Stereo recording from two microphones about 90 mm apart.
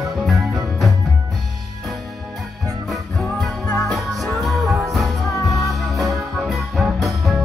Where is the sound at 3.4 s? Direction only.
Centre (ahead or behind).